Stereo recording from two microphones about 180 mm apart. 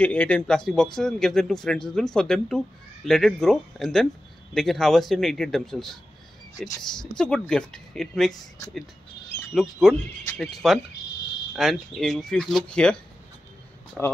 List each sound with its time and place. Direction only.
0.0 s speech: 10° left (ahead or behind)
9.5 s speech: centre (ahead or behind)
14.0 s speech: centre (ahead or behind)